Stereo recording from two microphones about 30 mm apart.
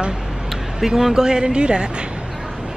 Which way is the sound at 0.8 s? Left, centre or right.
Centre.